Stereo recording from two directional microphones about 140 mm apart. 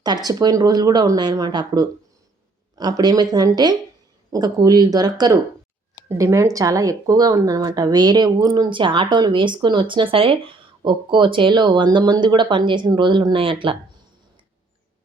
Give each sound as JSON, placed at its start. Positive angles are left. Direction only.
{"t": 0.0, "sound": "speech", "side_deg": -30}